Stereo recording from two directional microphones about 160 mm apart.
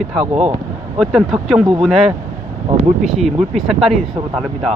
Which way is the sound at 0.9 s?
Centre (ahead or behind).